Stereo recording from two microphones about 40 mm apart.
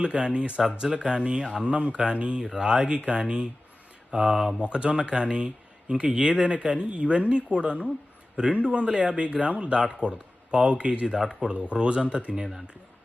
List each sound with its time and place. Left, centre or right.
0.0 s speech: right
0.6 s speech: centre
4.6 s speech: right